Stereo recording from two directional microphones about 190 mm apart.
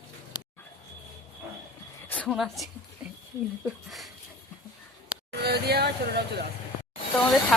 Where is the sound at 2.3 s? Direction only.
Centre (ahead or behind).